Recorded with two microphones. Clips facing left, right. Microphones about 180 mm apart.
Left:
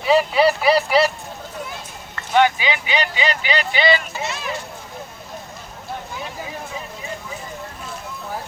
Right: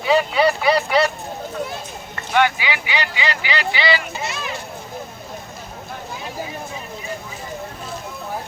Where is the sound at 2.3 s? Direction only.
20° left (ahead or behind).